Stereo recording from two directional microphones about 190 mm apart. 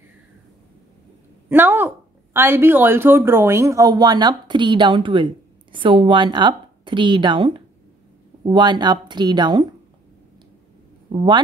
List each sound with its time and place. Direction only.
1.5 s a woman's voice: 10° right (ahead or behind)